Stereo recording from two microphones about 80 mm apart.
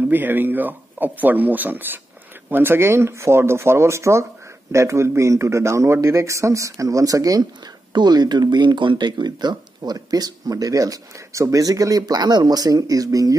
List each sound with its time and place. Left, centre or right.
0.1 s a man's voice: right
7.9 s speech: right